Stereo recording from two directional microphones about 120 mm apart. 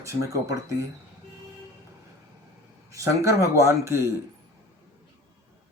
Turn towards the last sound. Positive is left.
turn(degrees=-25)  # may be behind; listen again after turning